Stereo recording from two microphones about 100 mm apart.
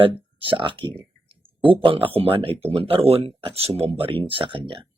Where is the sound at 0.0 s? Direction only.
60° right (ahead or behind).